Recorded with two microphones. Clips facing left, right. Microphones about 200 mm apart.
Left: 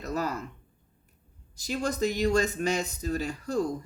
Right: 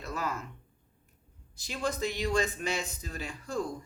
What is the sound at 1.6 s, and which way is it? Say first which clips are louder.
Speech: left 4 dB; 40° left (ahead or behind).